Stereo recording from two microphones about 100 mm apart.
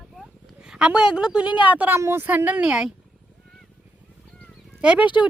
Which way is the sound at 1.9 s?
25° right (ahead or behind).